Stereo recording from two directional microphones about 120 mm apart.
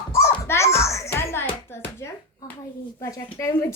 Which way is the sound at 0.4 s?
25° left (ahead or behind).